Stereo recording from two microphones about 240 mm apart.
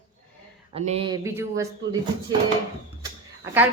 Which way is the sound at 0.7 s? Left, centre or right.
Right.